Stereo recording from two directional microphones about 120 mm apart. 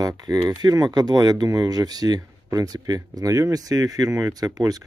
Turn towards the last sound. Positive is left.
turn(degrees=-30)  # may be behind; listen again after turning